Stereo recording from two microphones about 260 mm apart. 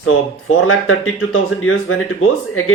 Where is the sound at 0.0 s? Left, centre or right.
Left.